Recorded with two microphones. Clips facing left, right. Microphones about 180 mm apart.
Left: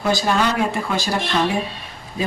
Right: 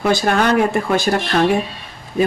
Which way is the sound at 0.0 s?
60° right (ahead or behind).